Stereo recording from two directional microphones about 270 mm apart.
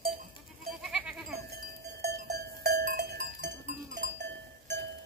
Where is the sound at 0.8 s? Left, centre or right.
Centre.